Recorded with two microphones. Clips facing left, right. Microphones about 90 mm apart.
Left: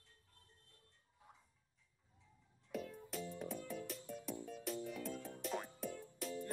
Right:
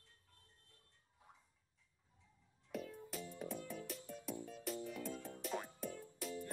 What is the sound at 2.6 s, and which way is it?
Music, centre (ahead or behind).